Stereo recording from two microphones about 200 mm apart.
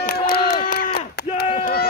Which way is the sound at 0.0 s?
50° left (ahead or behind).